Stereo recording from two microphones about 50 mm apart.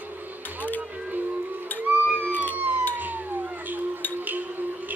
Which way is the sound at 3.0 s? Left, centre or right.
Right.